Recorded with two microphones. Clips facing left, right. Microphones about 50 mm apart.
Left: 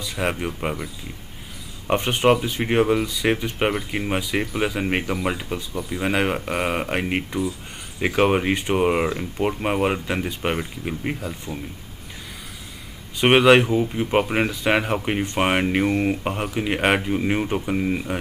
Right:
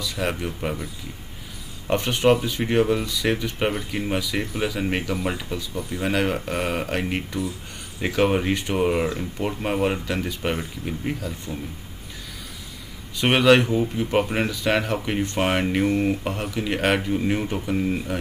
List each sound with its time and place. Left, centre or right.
0.0 s speech: left
1.9 s speech: left
13.2 s speech: left